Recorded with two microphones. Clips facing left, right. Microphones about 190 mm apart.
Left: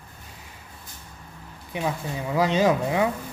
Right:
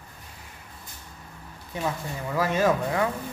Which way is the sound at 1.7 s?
15° left (ahead or behind).